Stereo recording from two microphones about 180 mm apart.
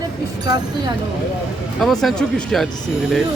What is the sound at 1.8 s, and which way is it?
A man's voice, centre (ahead or behind).